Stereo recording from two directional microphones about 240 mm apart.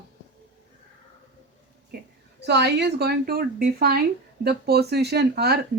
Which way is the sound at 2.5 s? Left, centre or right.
Right.